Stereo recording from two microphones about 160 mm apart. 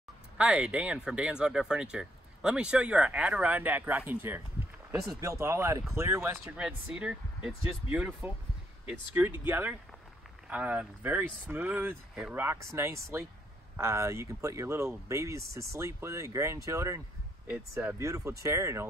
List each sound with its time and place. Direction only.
0.4 s speech: 5° right (ahead or behind)
6.5 s speech: 5° right (ahead or behind)